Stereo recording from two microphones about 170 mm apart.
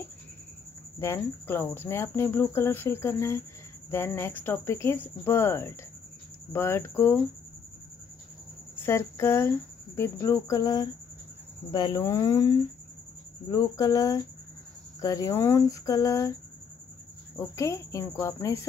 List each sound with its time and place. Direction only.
0.9 s speech: 15° left (ahead or behind)
8.7 s speech: 15° left (ahead or behind)
17.4 s speech: 15° left (ahead or behind)